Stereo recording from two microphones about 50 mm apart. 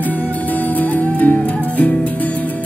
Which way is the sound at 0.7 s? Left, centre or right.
Left.